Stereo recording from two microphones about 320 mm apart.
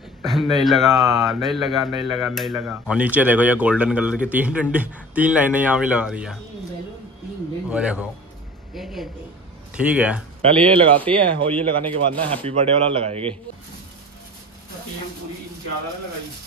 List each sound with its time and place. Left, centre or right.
0.2 s a sound: centre
0.7 s speech: centre
7.7 s speech: centre
10.4 s speech: centre